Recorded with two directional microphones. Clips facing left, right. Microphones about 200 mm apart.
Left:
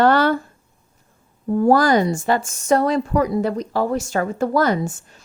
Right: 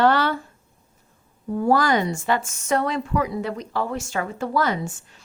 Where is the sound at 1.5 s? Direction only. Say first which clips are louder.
Left 5 dB; 40° left (ahead or behind).